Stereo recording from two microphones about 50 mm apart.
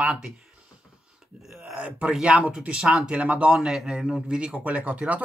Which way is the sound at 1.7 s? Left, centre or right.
Right.